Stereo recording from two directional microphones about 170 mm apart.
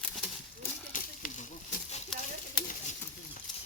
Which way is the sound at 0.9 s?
50° left (ahead or behind).